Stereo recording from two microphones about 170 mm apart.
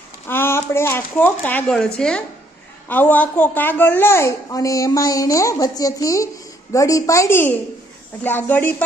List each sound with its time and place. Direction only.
0.3 s a woman's voice: 15° left (ahead or behind)